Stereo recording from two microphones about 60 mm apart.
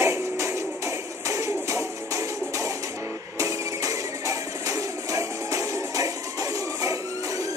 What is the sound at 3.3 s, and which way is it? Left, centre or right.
Music, right.